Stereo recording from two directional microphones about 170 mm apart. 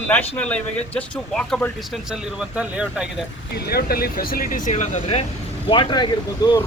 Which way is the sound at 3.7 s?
65° left (ahead or behind).